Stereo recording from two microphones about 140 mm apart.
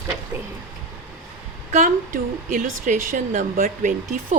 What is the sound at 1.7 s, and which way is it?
A woman's voice, 70° right (ahead or behind).